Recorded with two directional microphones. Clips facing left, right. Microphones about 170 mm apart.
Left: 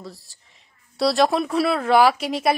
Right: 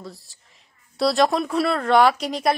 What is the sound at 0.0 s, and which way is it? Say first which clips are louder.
A woman's voice: even; centre (ahead or behind).